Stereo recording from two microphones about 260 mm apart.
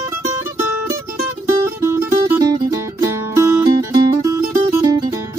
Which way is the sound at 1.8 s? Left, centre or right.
Centre.